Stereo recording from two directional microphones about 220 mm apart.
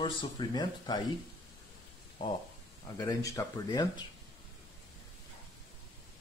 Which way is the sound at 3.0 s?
15° left (ahead or behind).